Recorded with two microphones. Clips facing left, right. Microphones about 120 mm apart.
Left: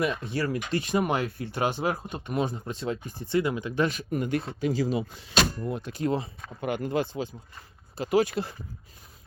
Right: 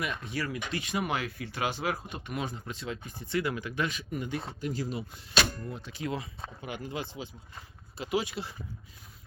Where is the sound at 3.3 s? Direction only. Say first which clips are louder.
Left 5 dB; 25° left (ahead or behind).